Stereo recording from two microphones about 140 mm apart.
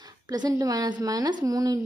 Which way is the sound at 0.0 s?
25° right (ahead or behind).